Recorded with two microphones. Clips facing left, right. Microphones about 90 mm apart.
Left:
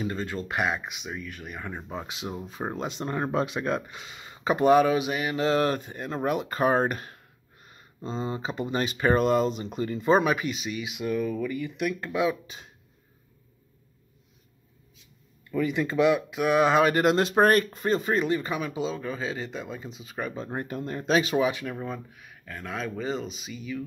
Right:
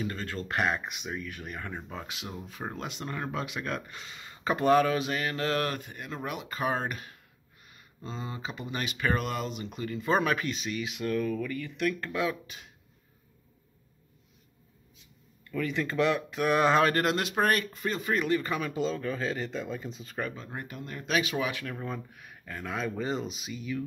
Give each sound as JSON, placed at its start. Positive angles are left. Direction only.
{"t": 0.0, "sound": "speech", "side_deg": 20}
{"t": 7.6, "sound": "speech", "side_deg": 30}
{"t": 15.5, "sound": "speech", "side_deg": 15}
{"t": 17.0, "sound": "speech", "side_deg": 25}
{"t": 17.3, "sound": "speech", "side_deg": 40}
{"t": 20.3, "sound": "speech", "side_deg": 35}
{"t": 21.4, "sound": "speech", "side_deg": 20}
{"t": 21.7, "sound": "speech", "side_deg": 5}